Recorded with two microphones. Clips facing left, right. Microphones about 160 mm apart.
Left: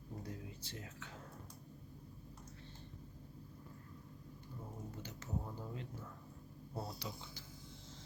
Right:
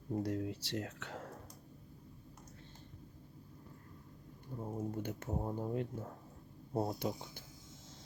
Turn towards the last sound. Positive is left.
turn(degrees=-50)  # may be behind; listen again after turning